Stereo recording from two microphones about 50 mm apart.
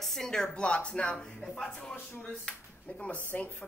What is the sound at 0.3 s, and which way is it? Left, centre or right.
Speech, centre.